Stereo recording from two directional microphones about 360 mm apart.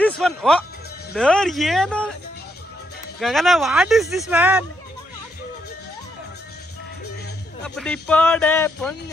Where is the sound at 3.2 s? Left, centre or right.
Centre.